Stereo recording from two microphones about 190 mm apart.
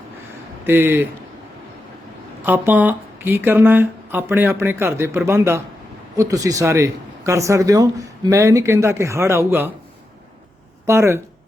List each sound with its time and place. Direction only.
0.6 s speech: 10° right (ahead or behind)
2.4 s speech: 10° right (ahead or behind)
10.8 s speech: 15° right (ahead or behind)